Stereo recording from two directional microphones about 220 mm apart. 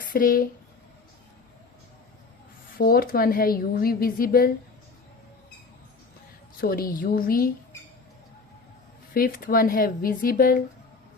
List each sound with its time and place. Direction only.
0.0 s speech: 40° left (ahead or behind)
2.7 s a woman's voice: 40° left (ahead or behind)
6.6 s speech: 40° left (ahead or behind)
9.1 s speech: 40° left (ahead or behind)